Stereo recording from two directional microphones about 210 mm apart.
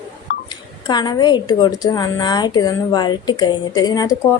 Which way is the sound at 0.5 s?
20° left (ahead or behind).